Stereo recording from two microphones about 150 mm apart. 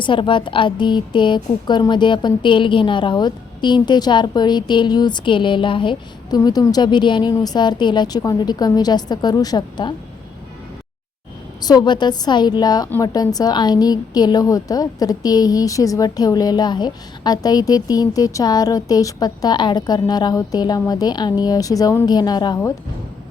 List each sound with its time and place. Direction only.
0.0 s a woman's voice: 35° left (ahead or behind)
11.6 s a woman's voice: 25° left (ahead or behind)